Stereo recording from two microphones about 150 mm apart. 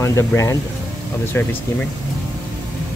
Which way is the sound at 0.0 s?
20° left (ahead or behind).